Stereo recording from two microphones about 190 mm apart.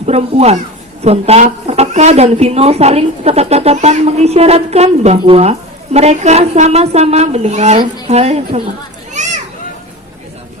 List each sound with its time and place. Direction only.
0.0 s a woman's voice: 35° right (ahead or behind)
9.1 s children playing: 40° right (ahead or behind)